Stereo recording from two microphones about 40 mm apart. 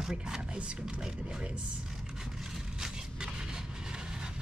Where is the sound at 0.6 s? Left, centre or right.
Right.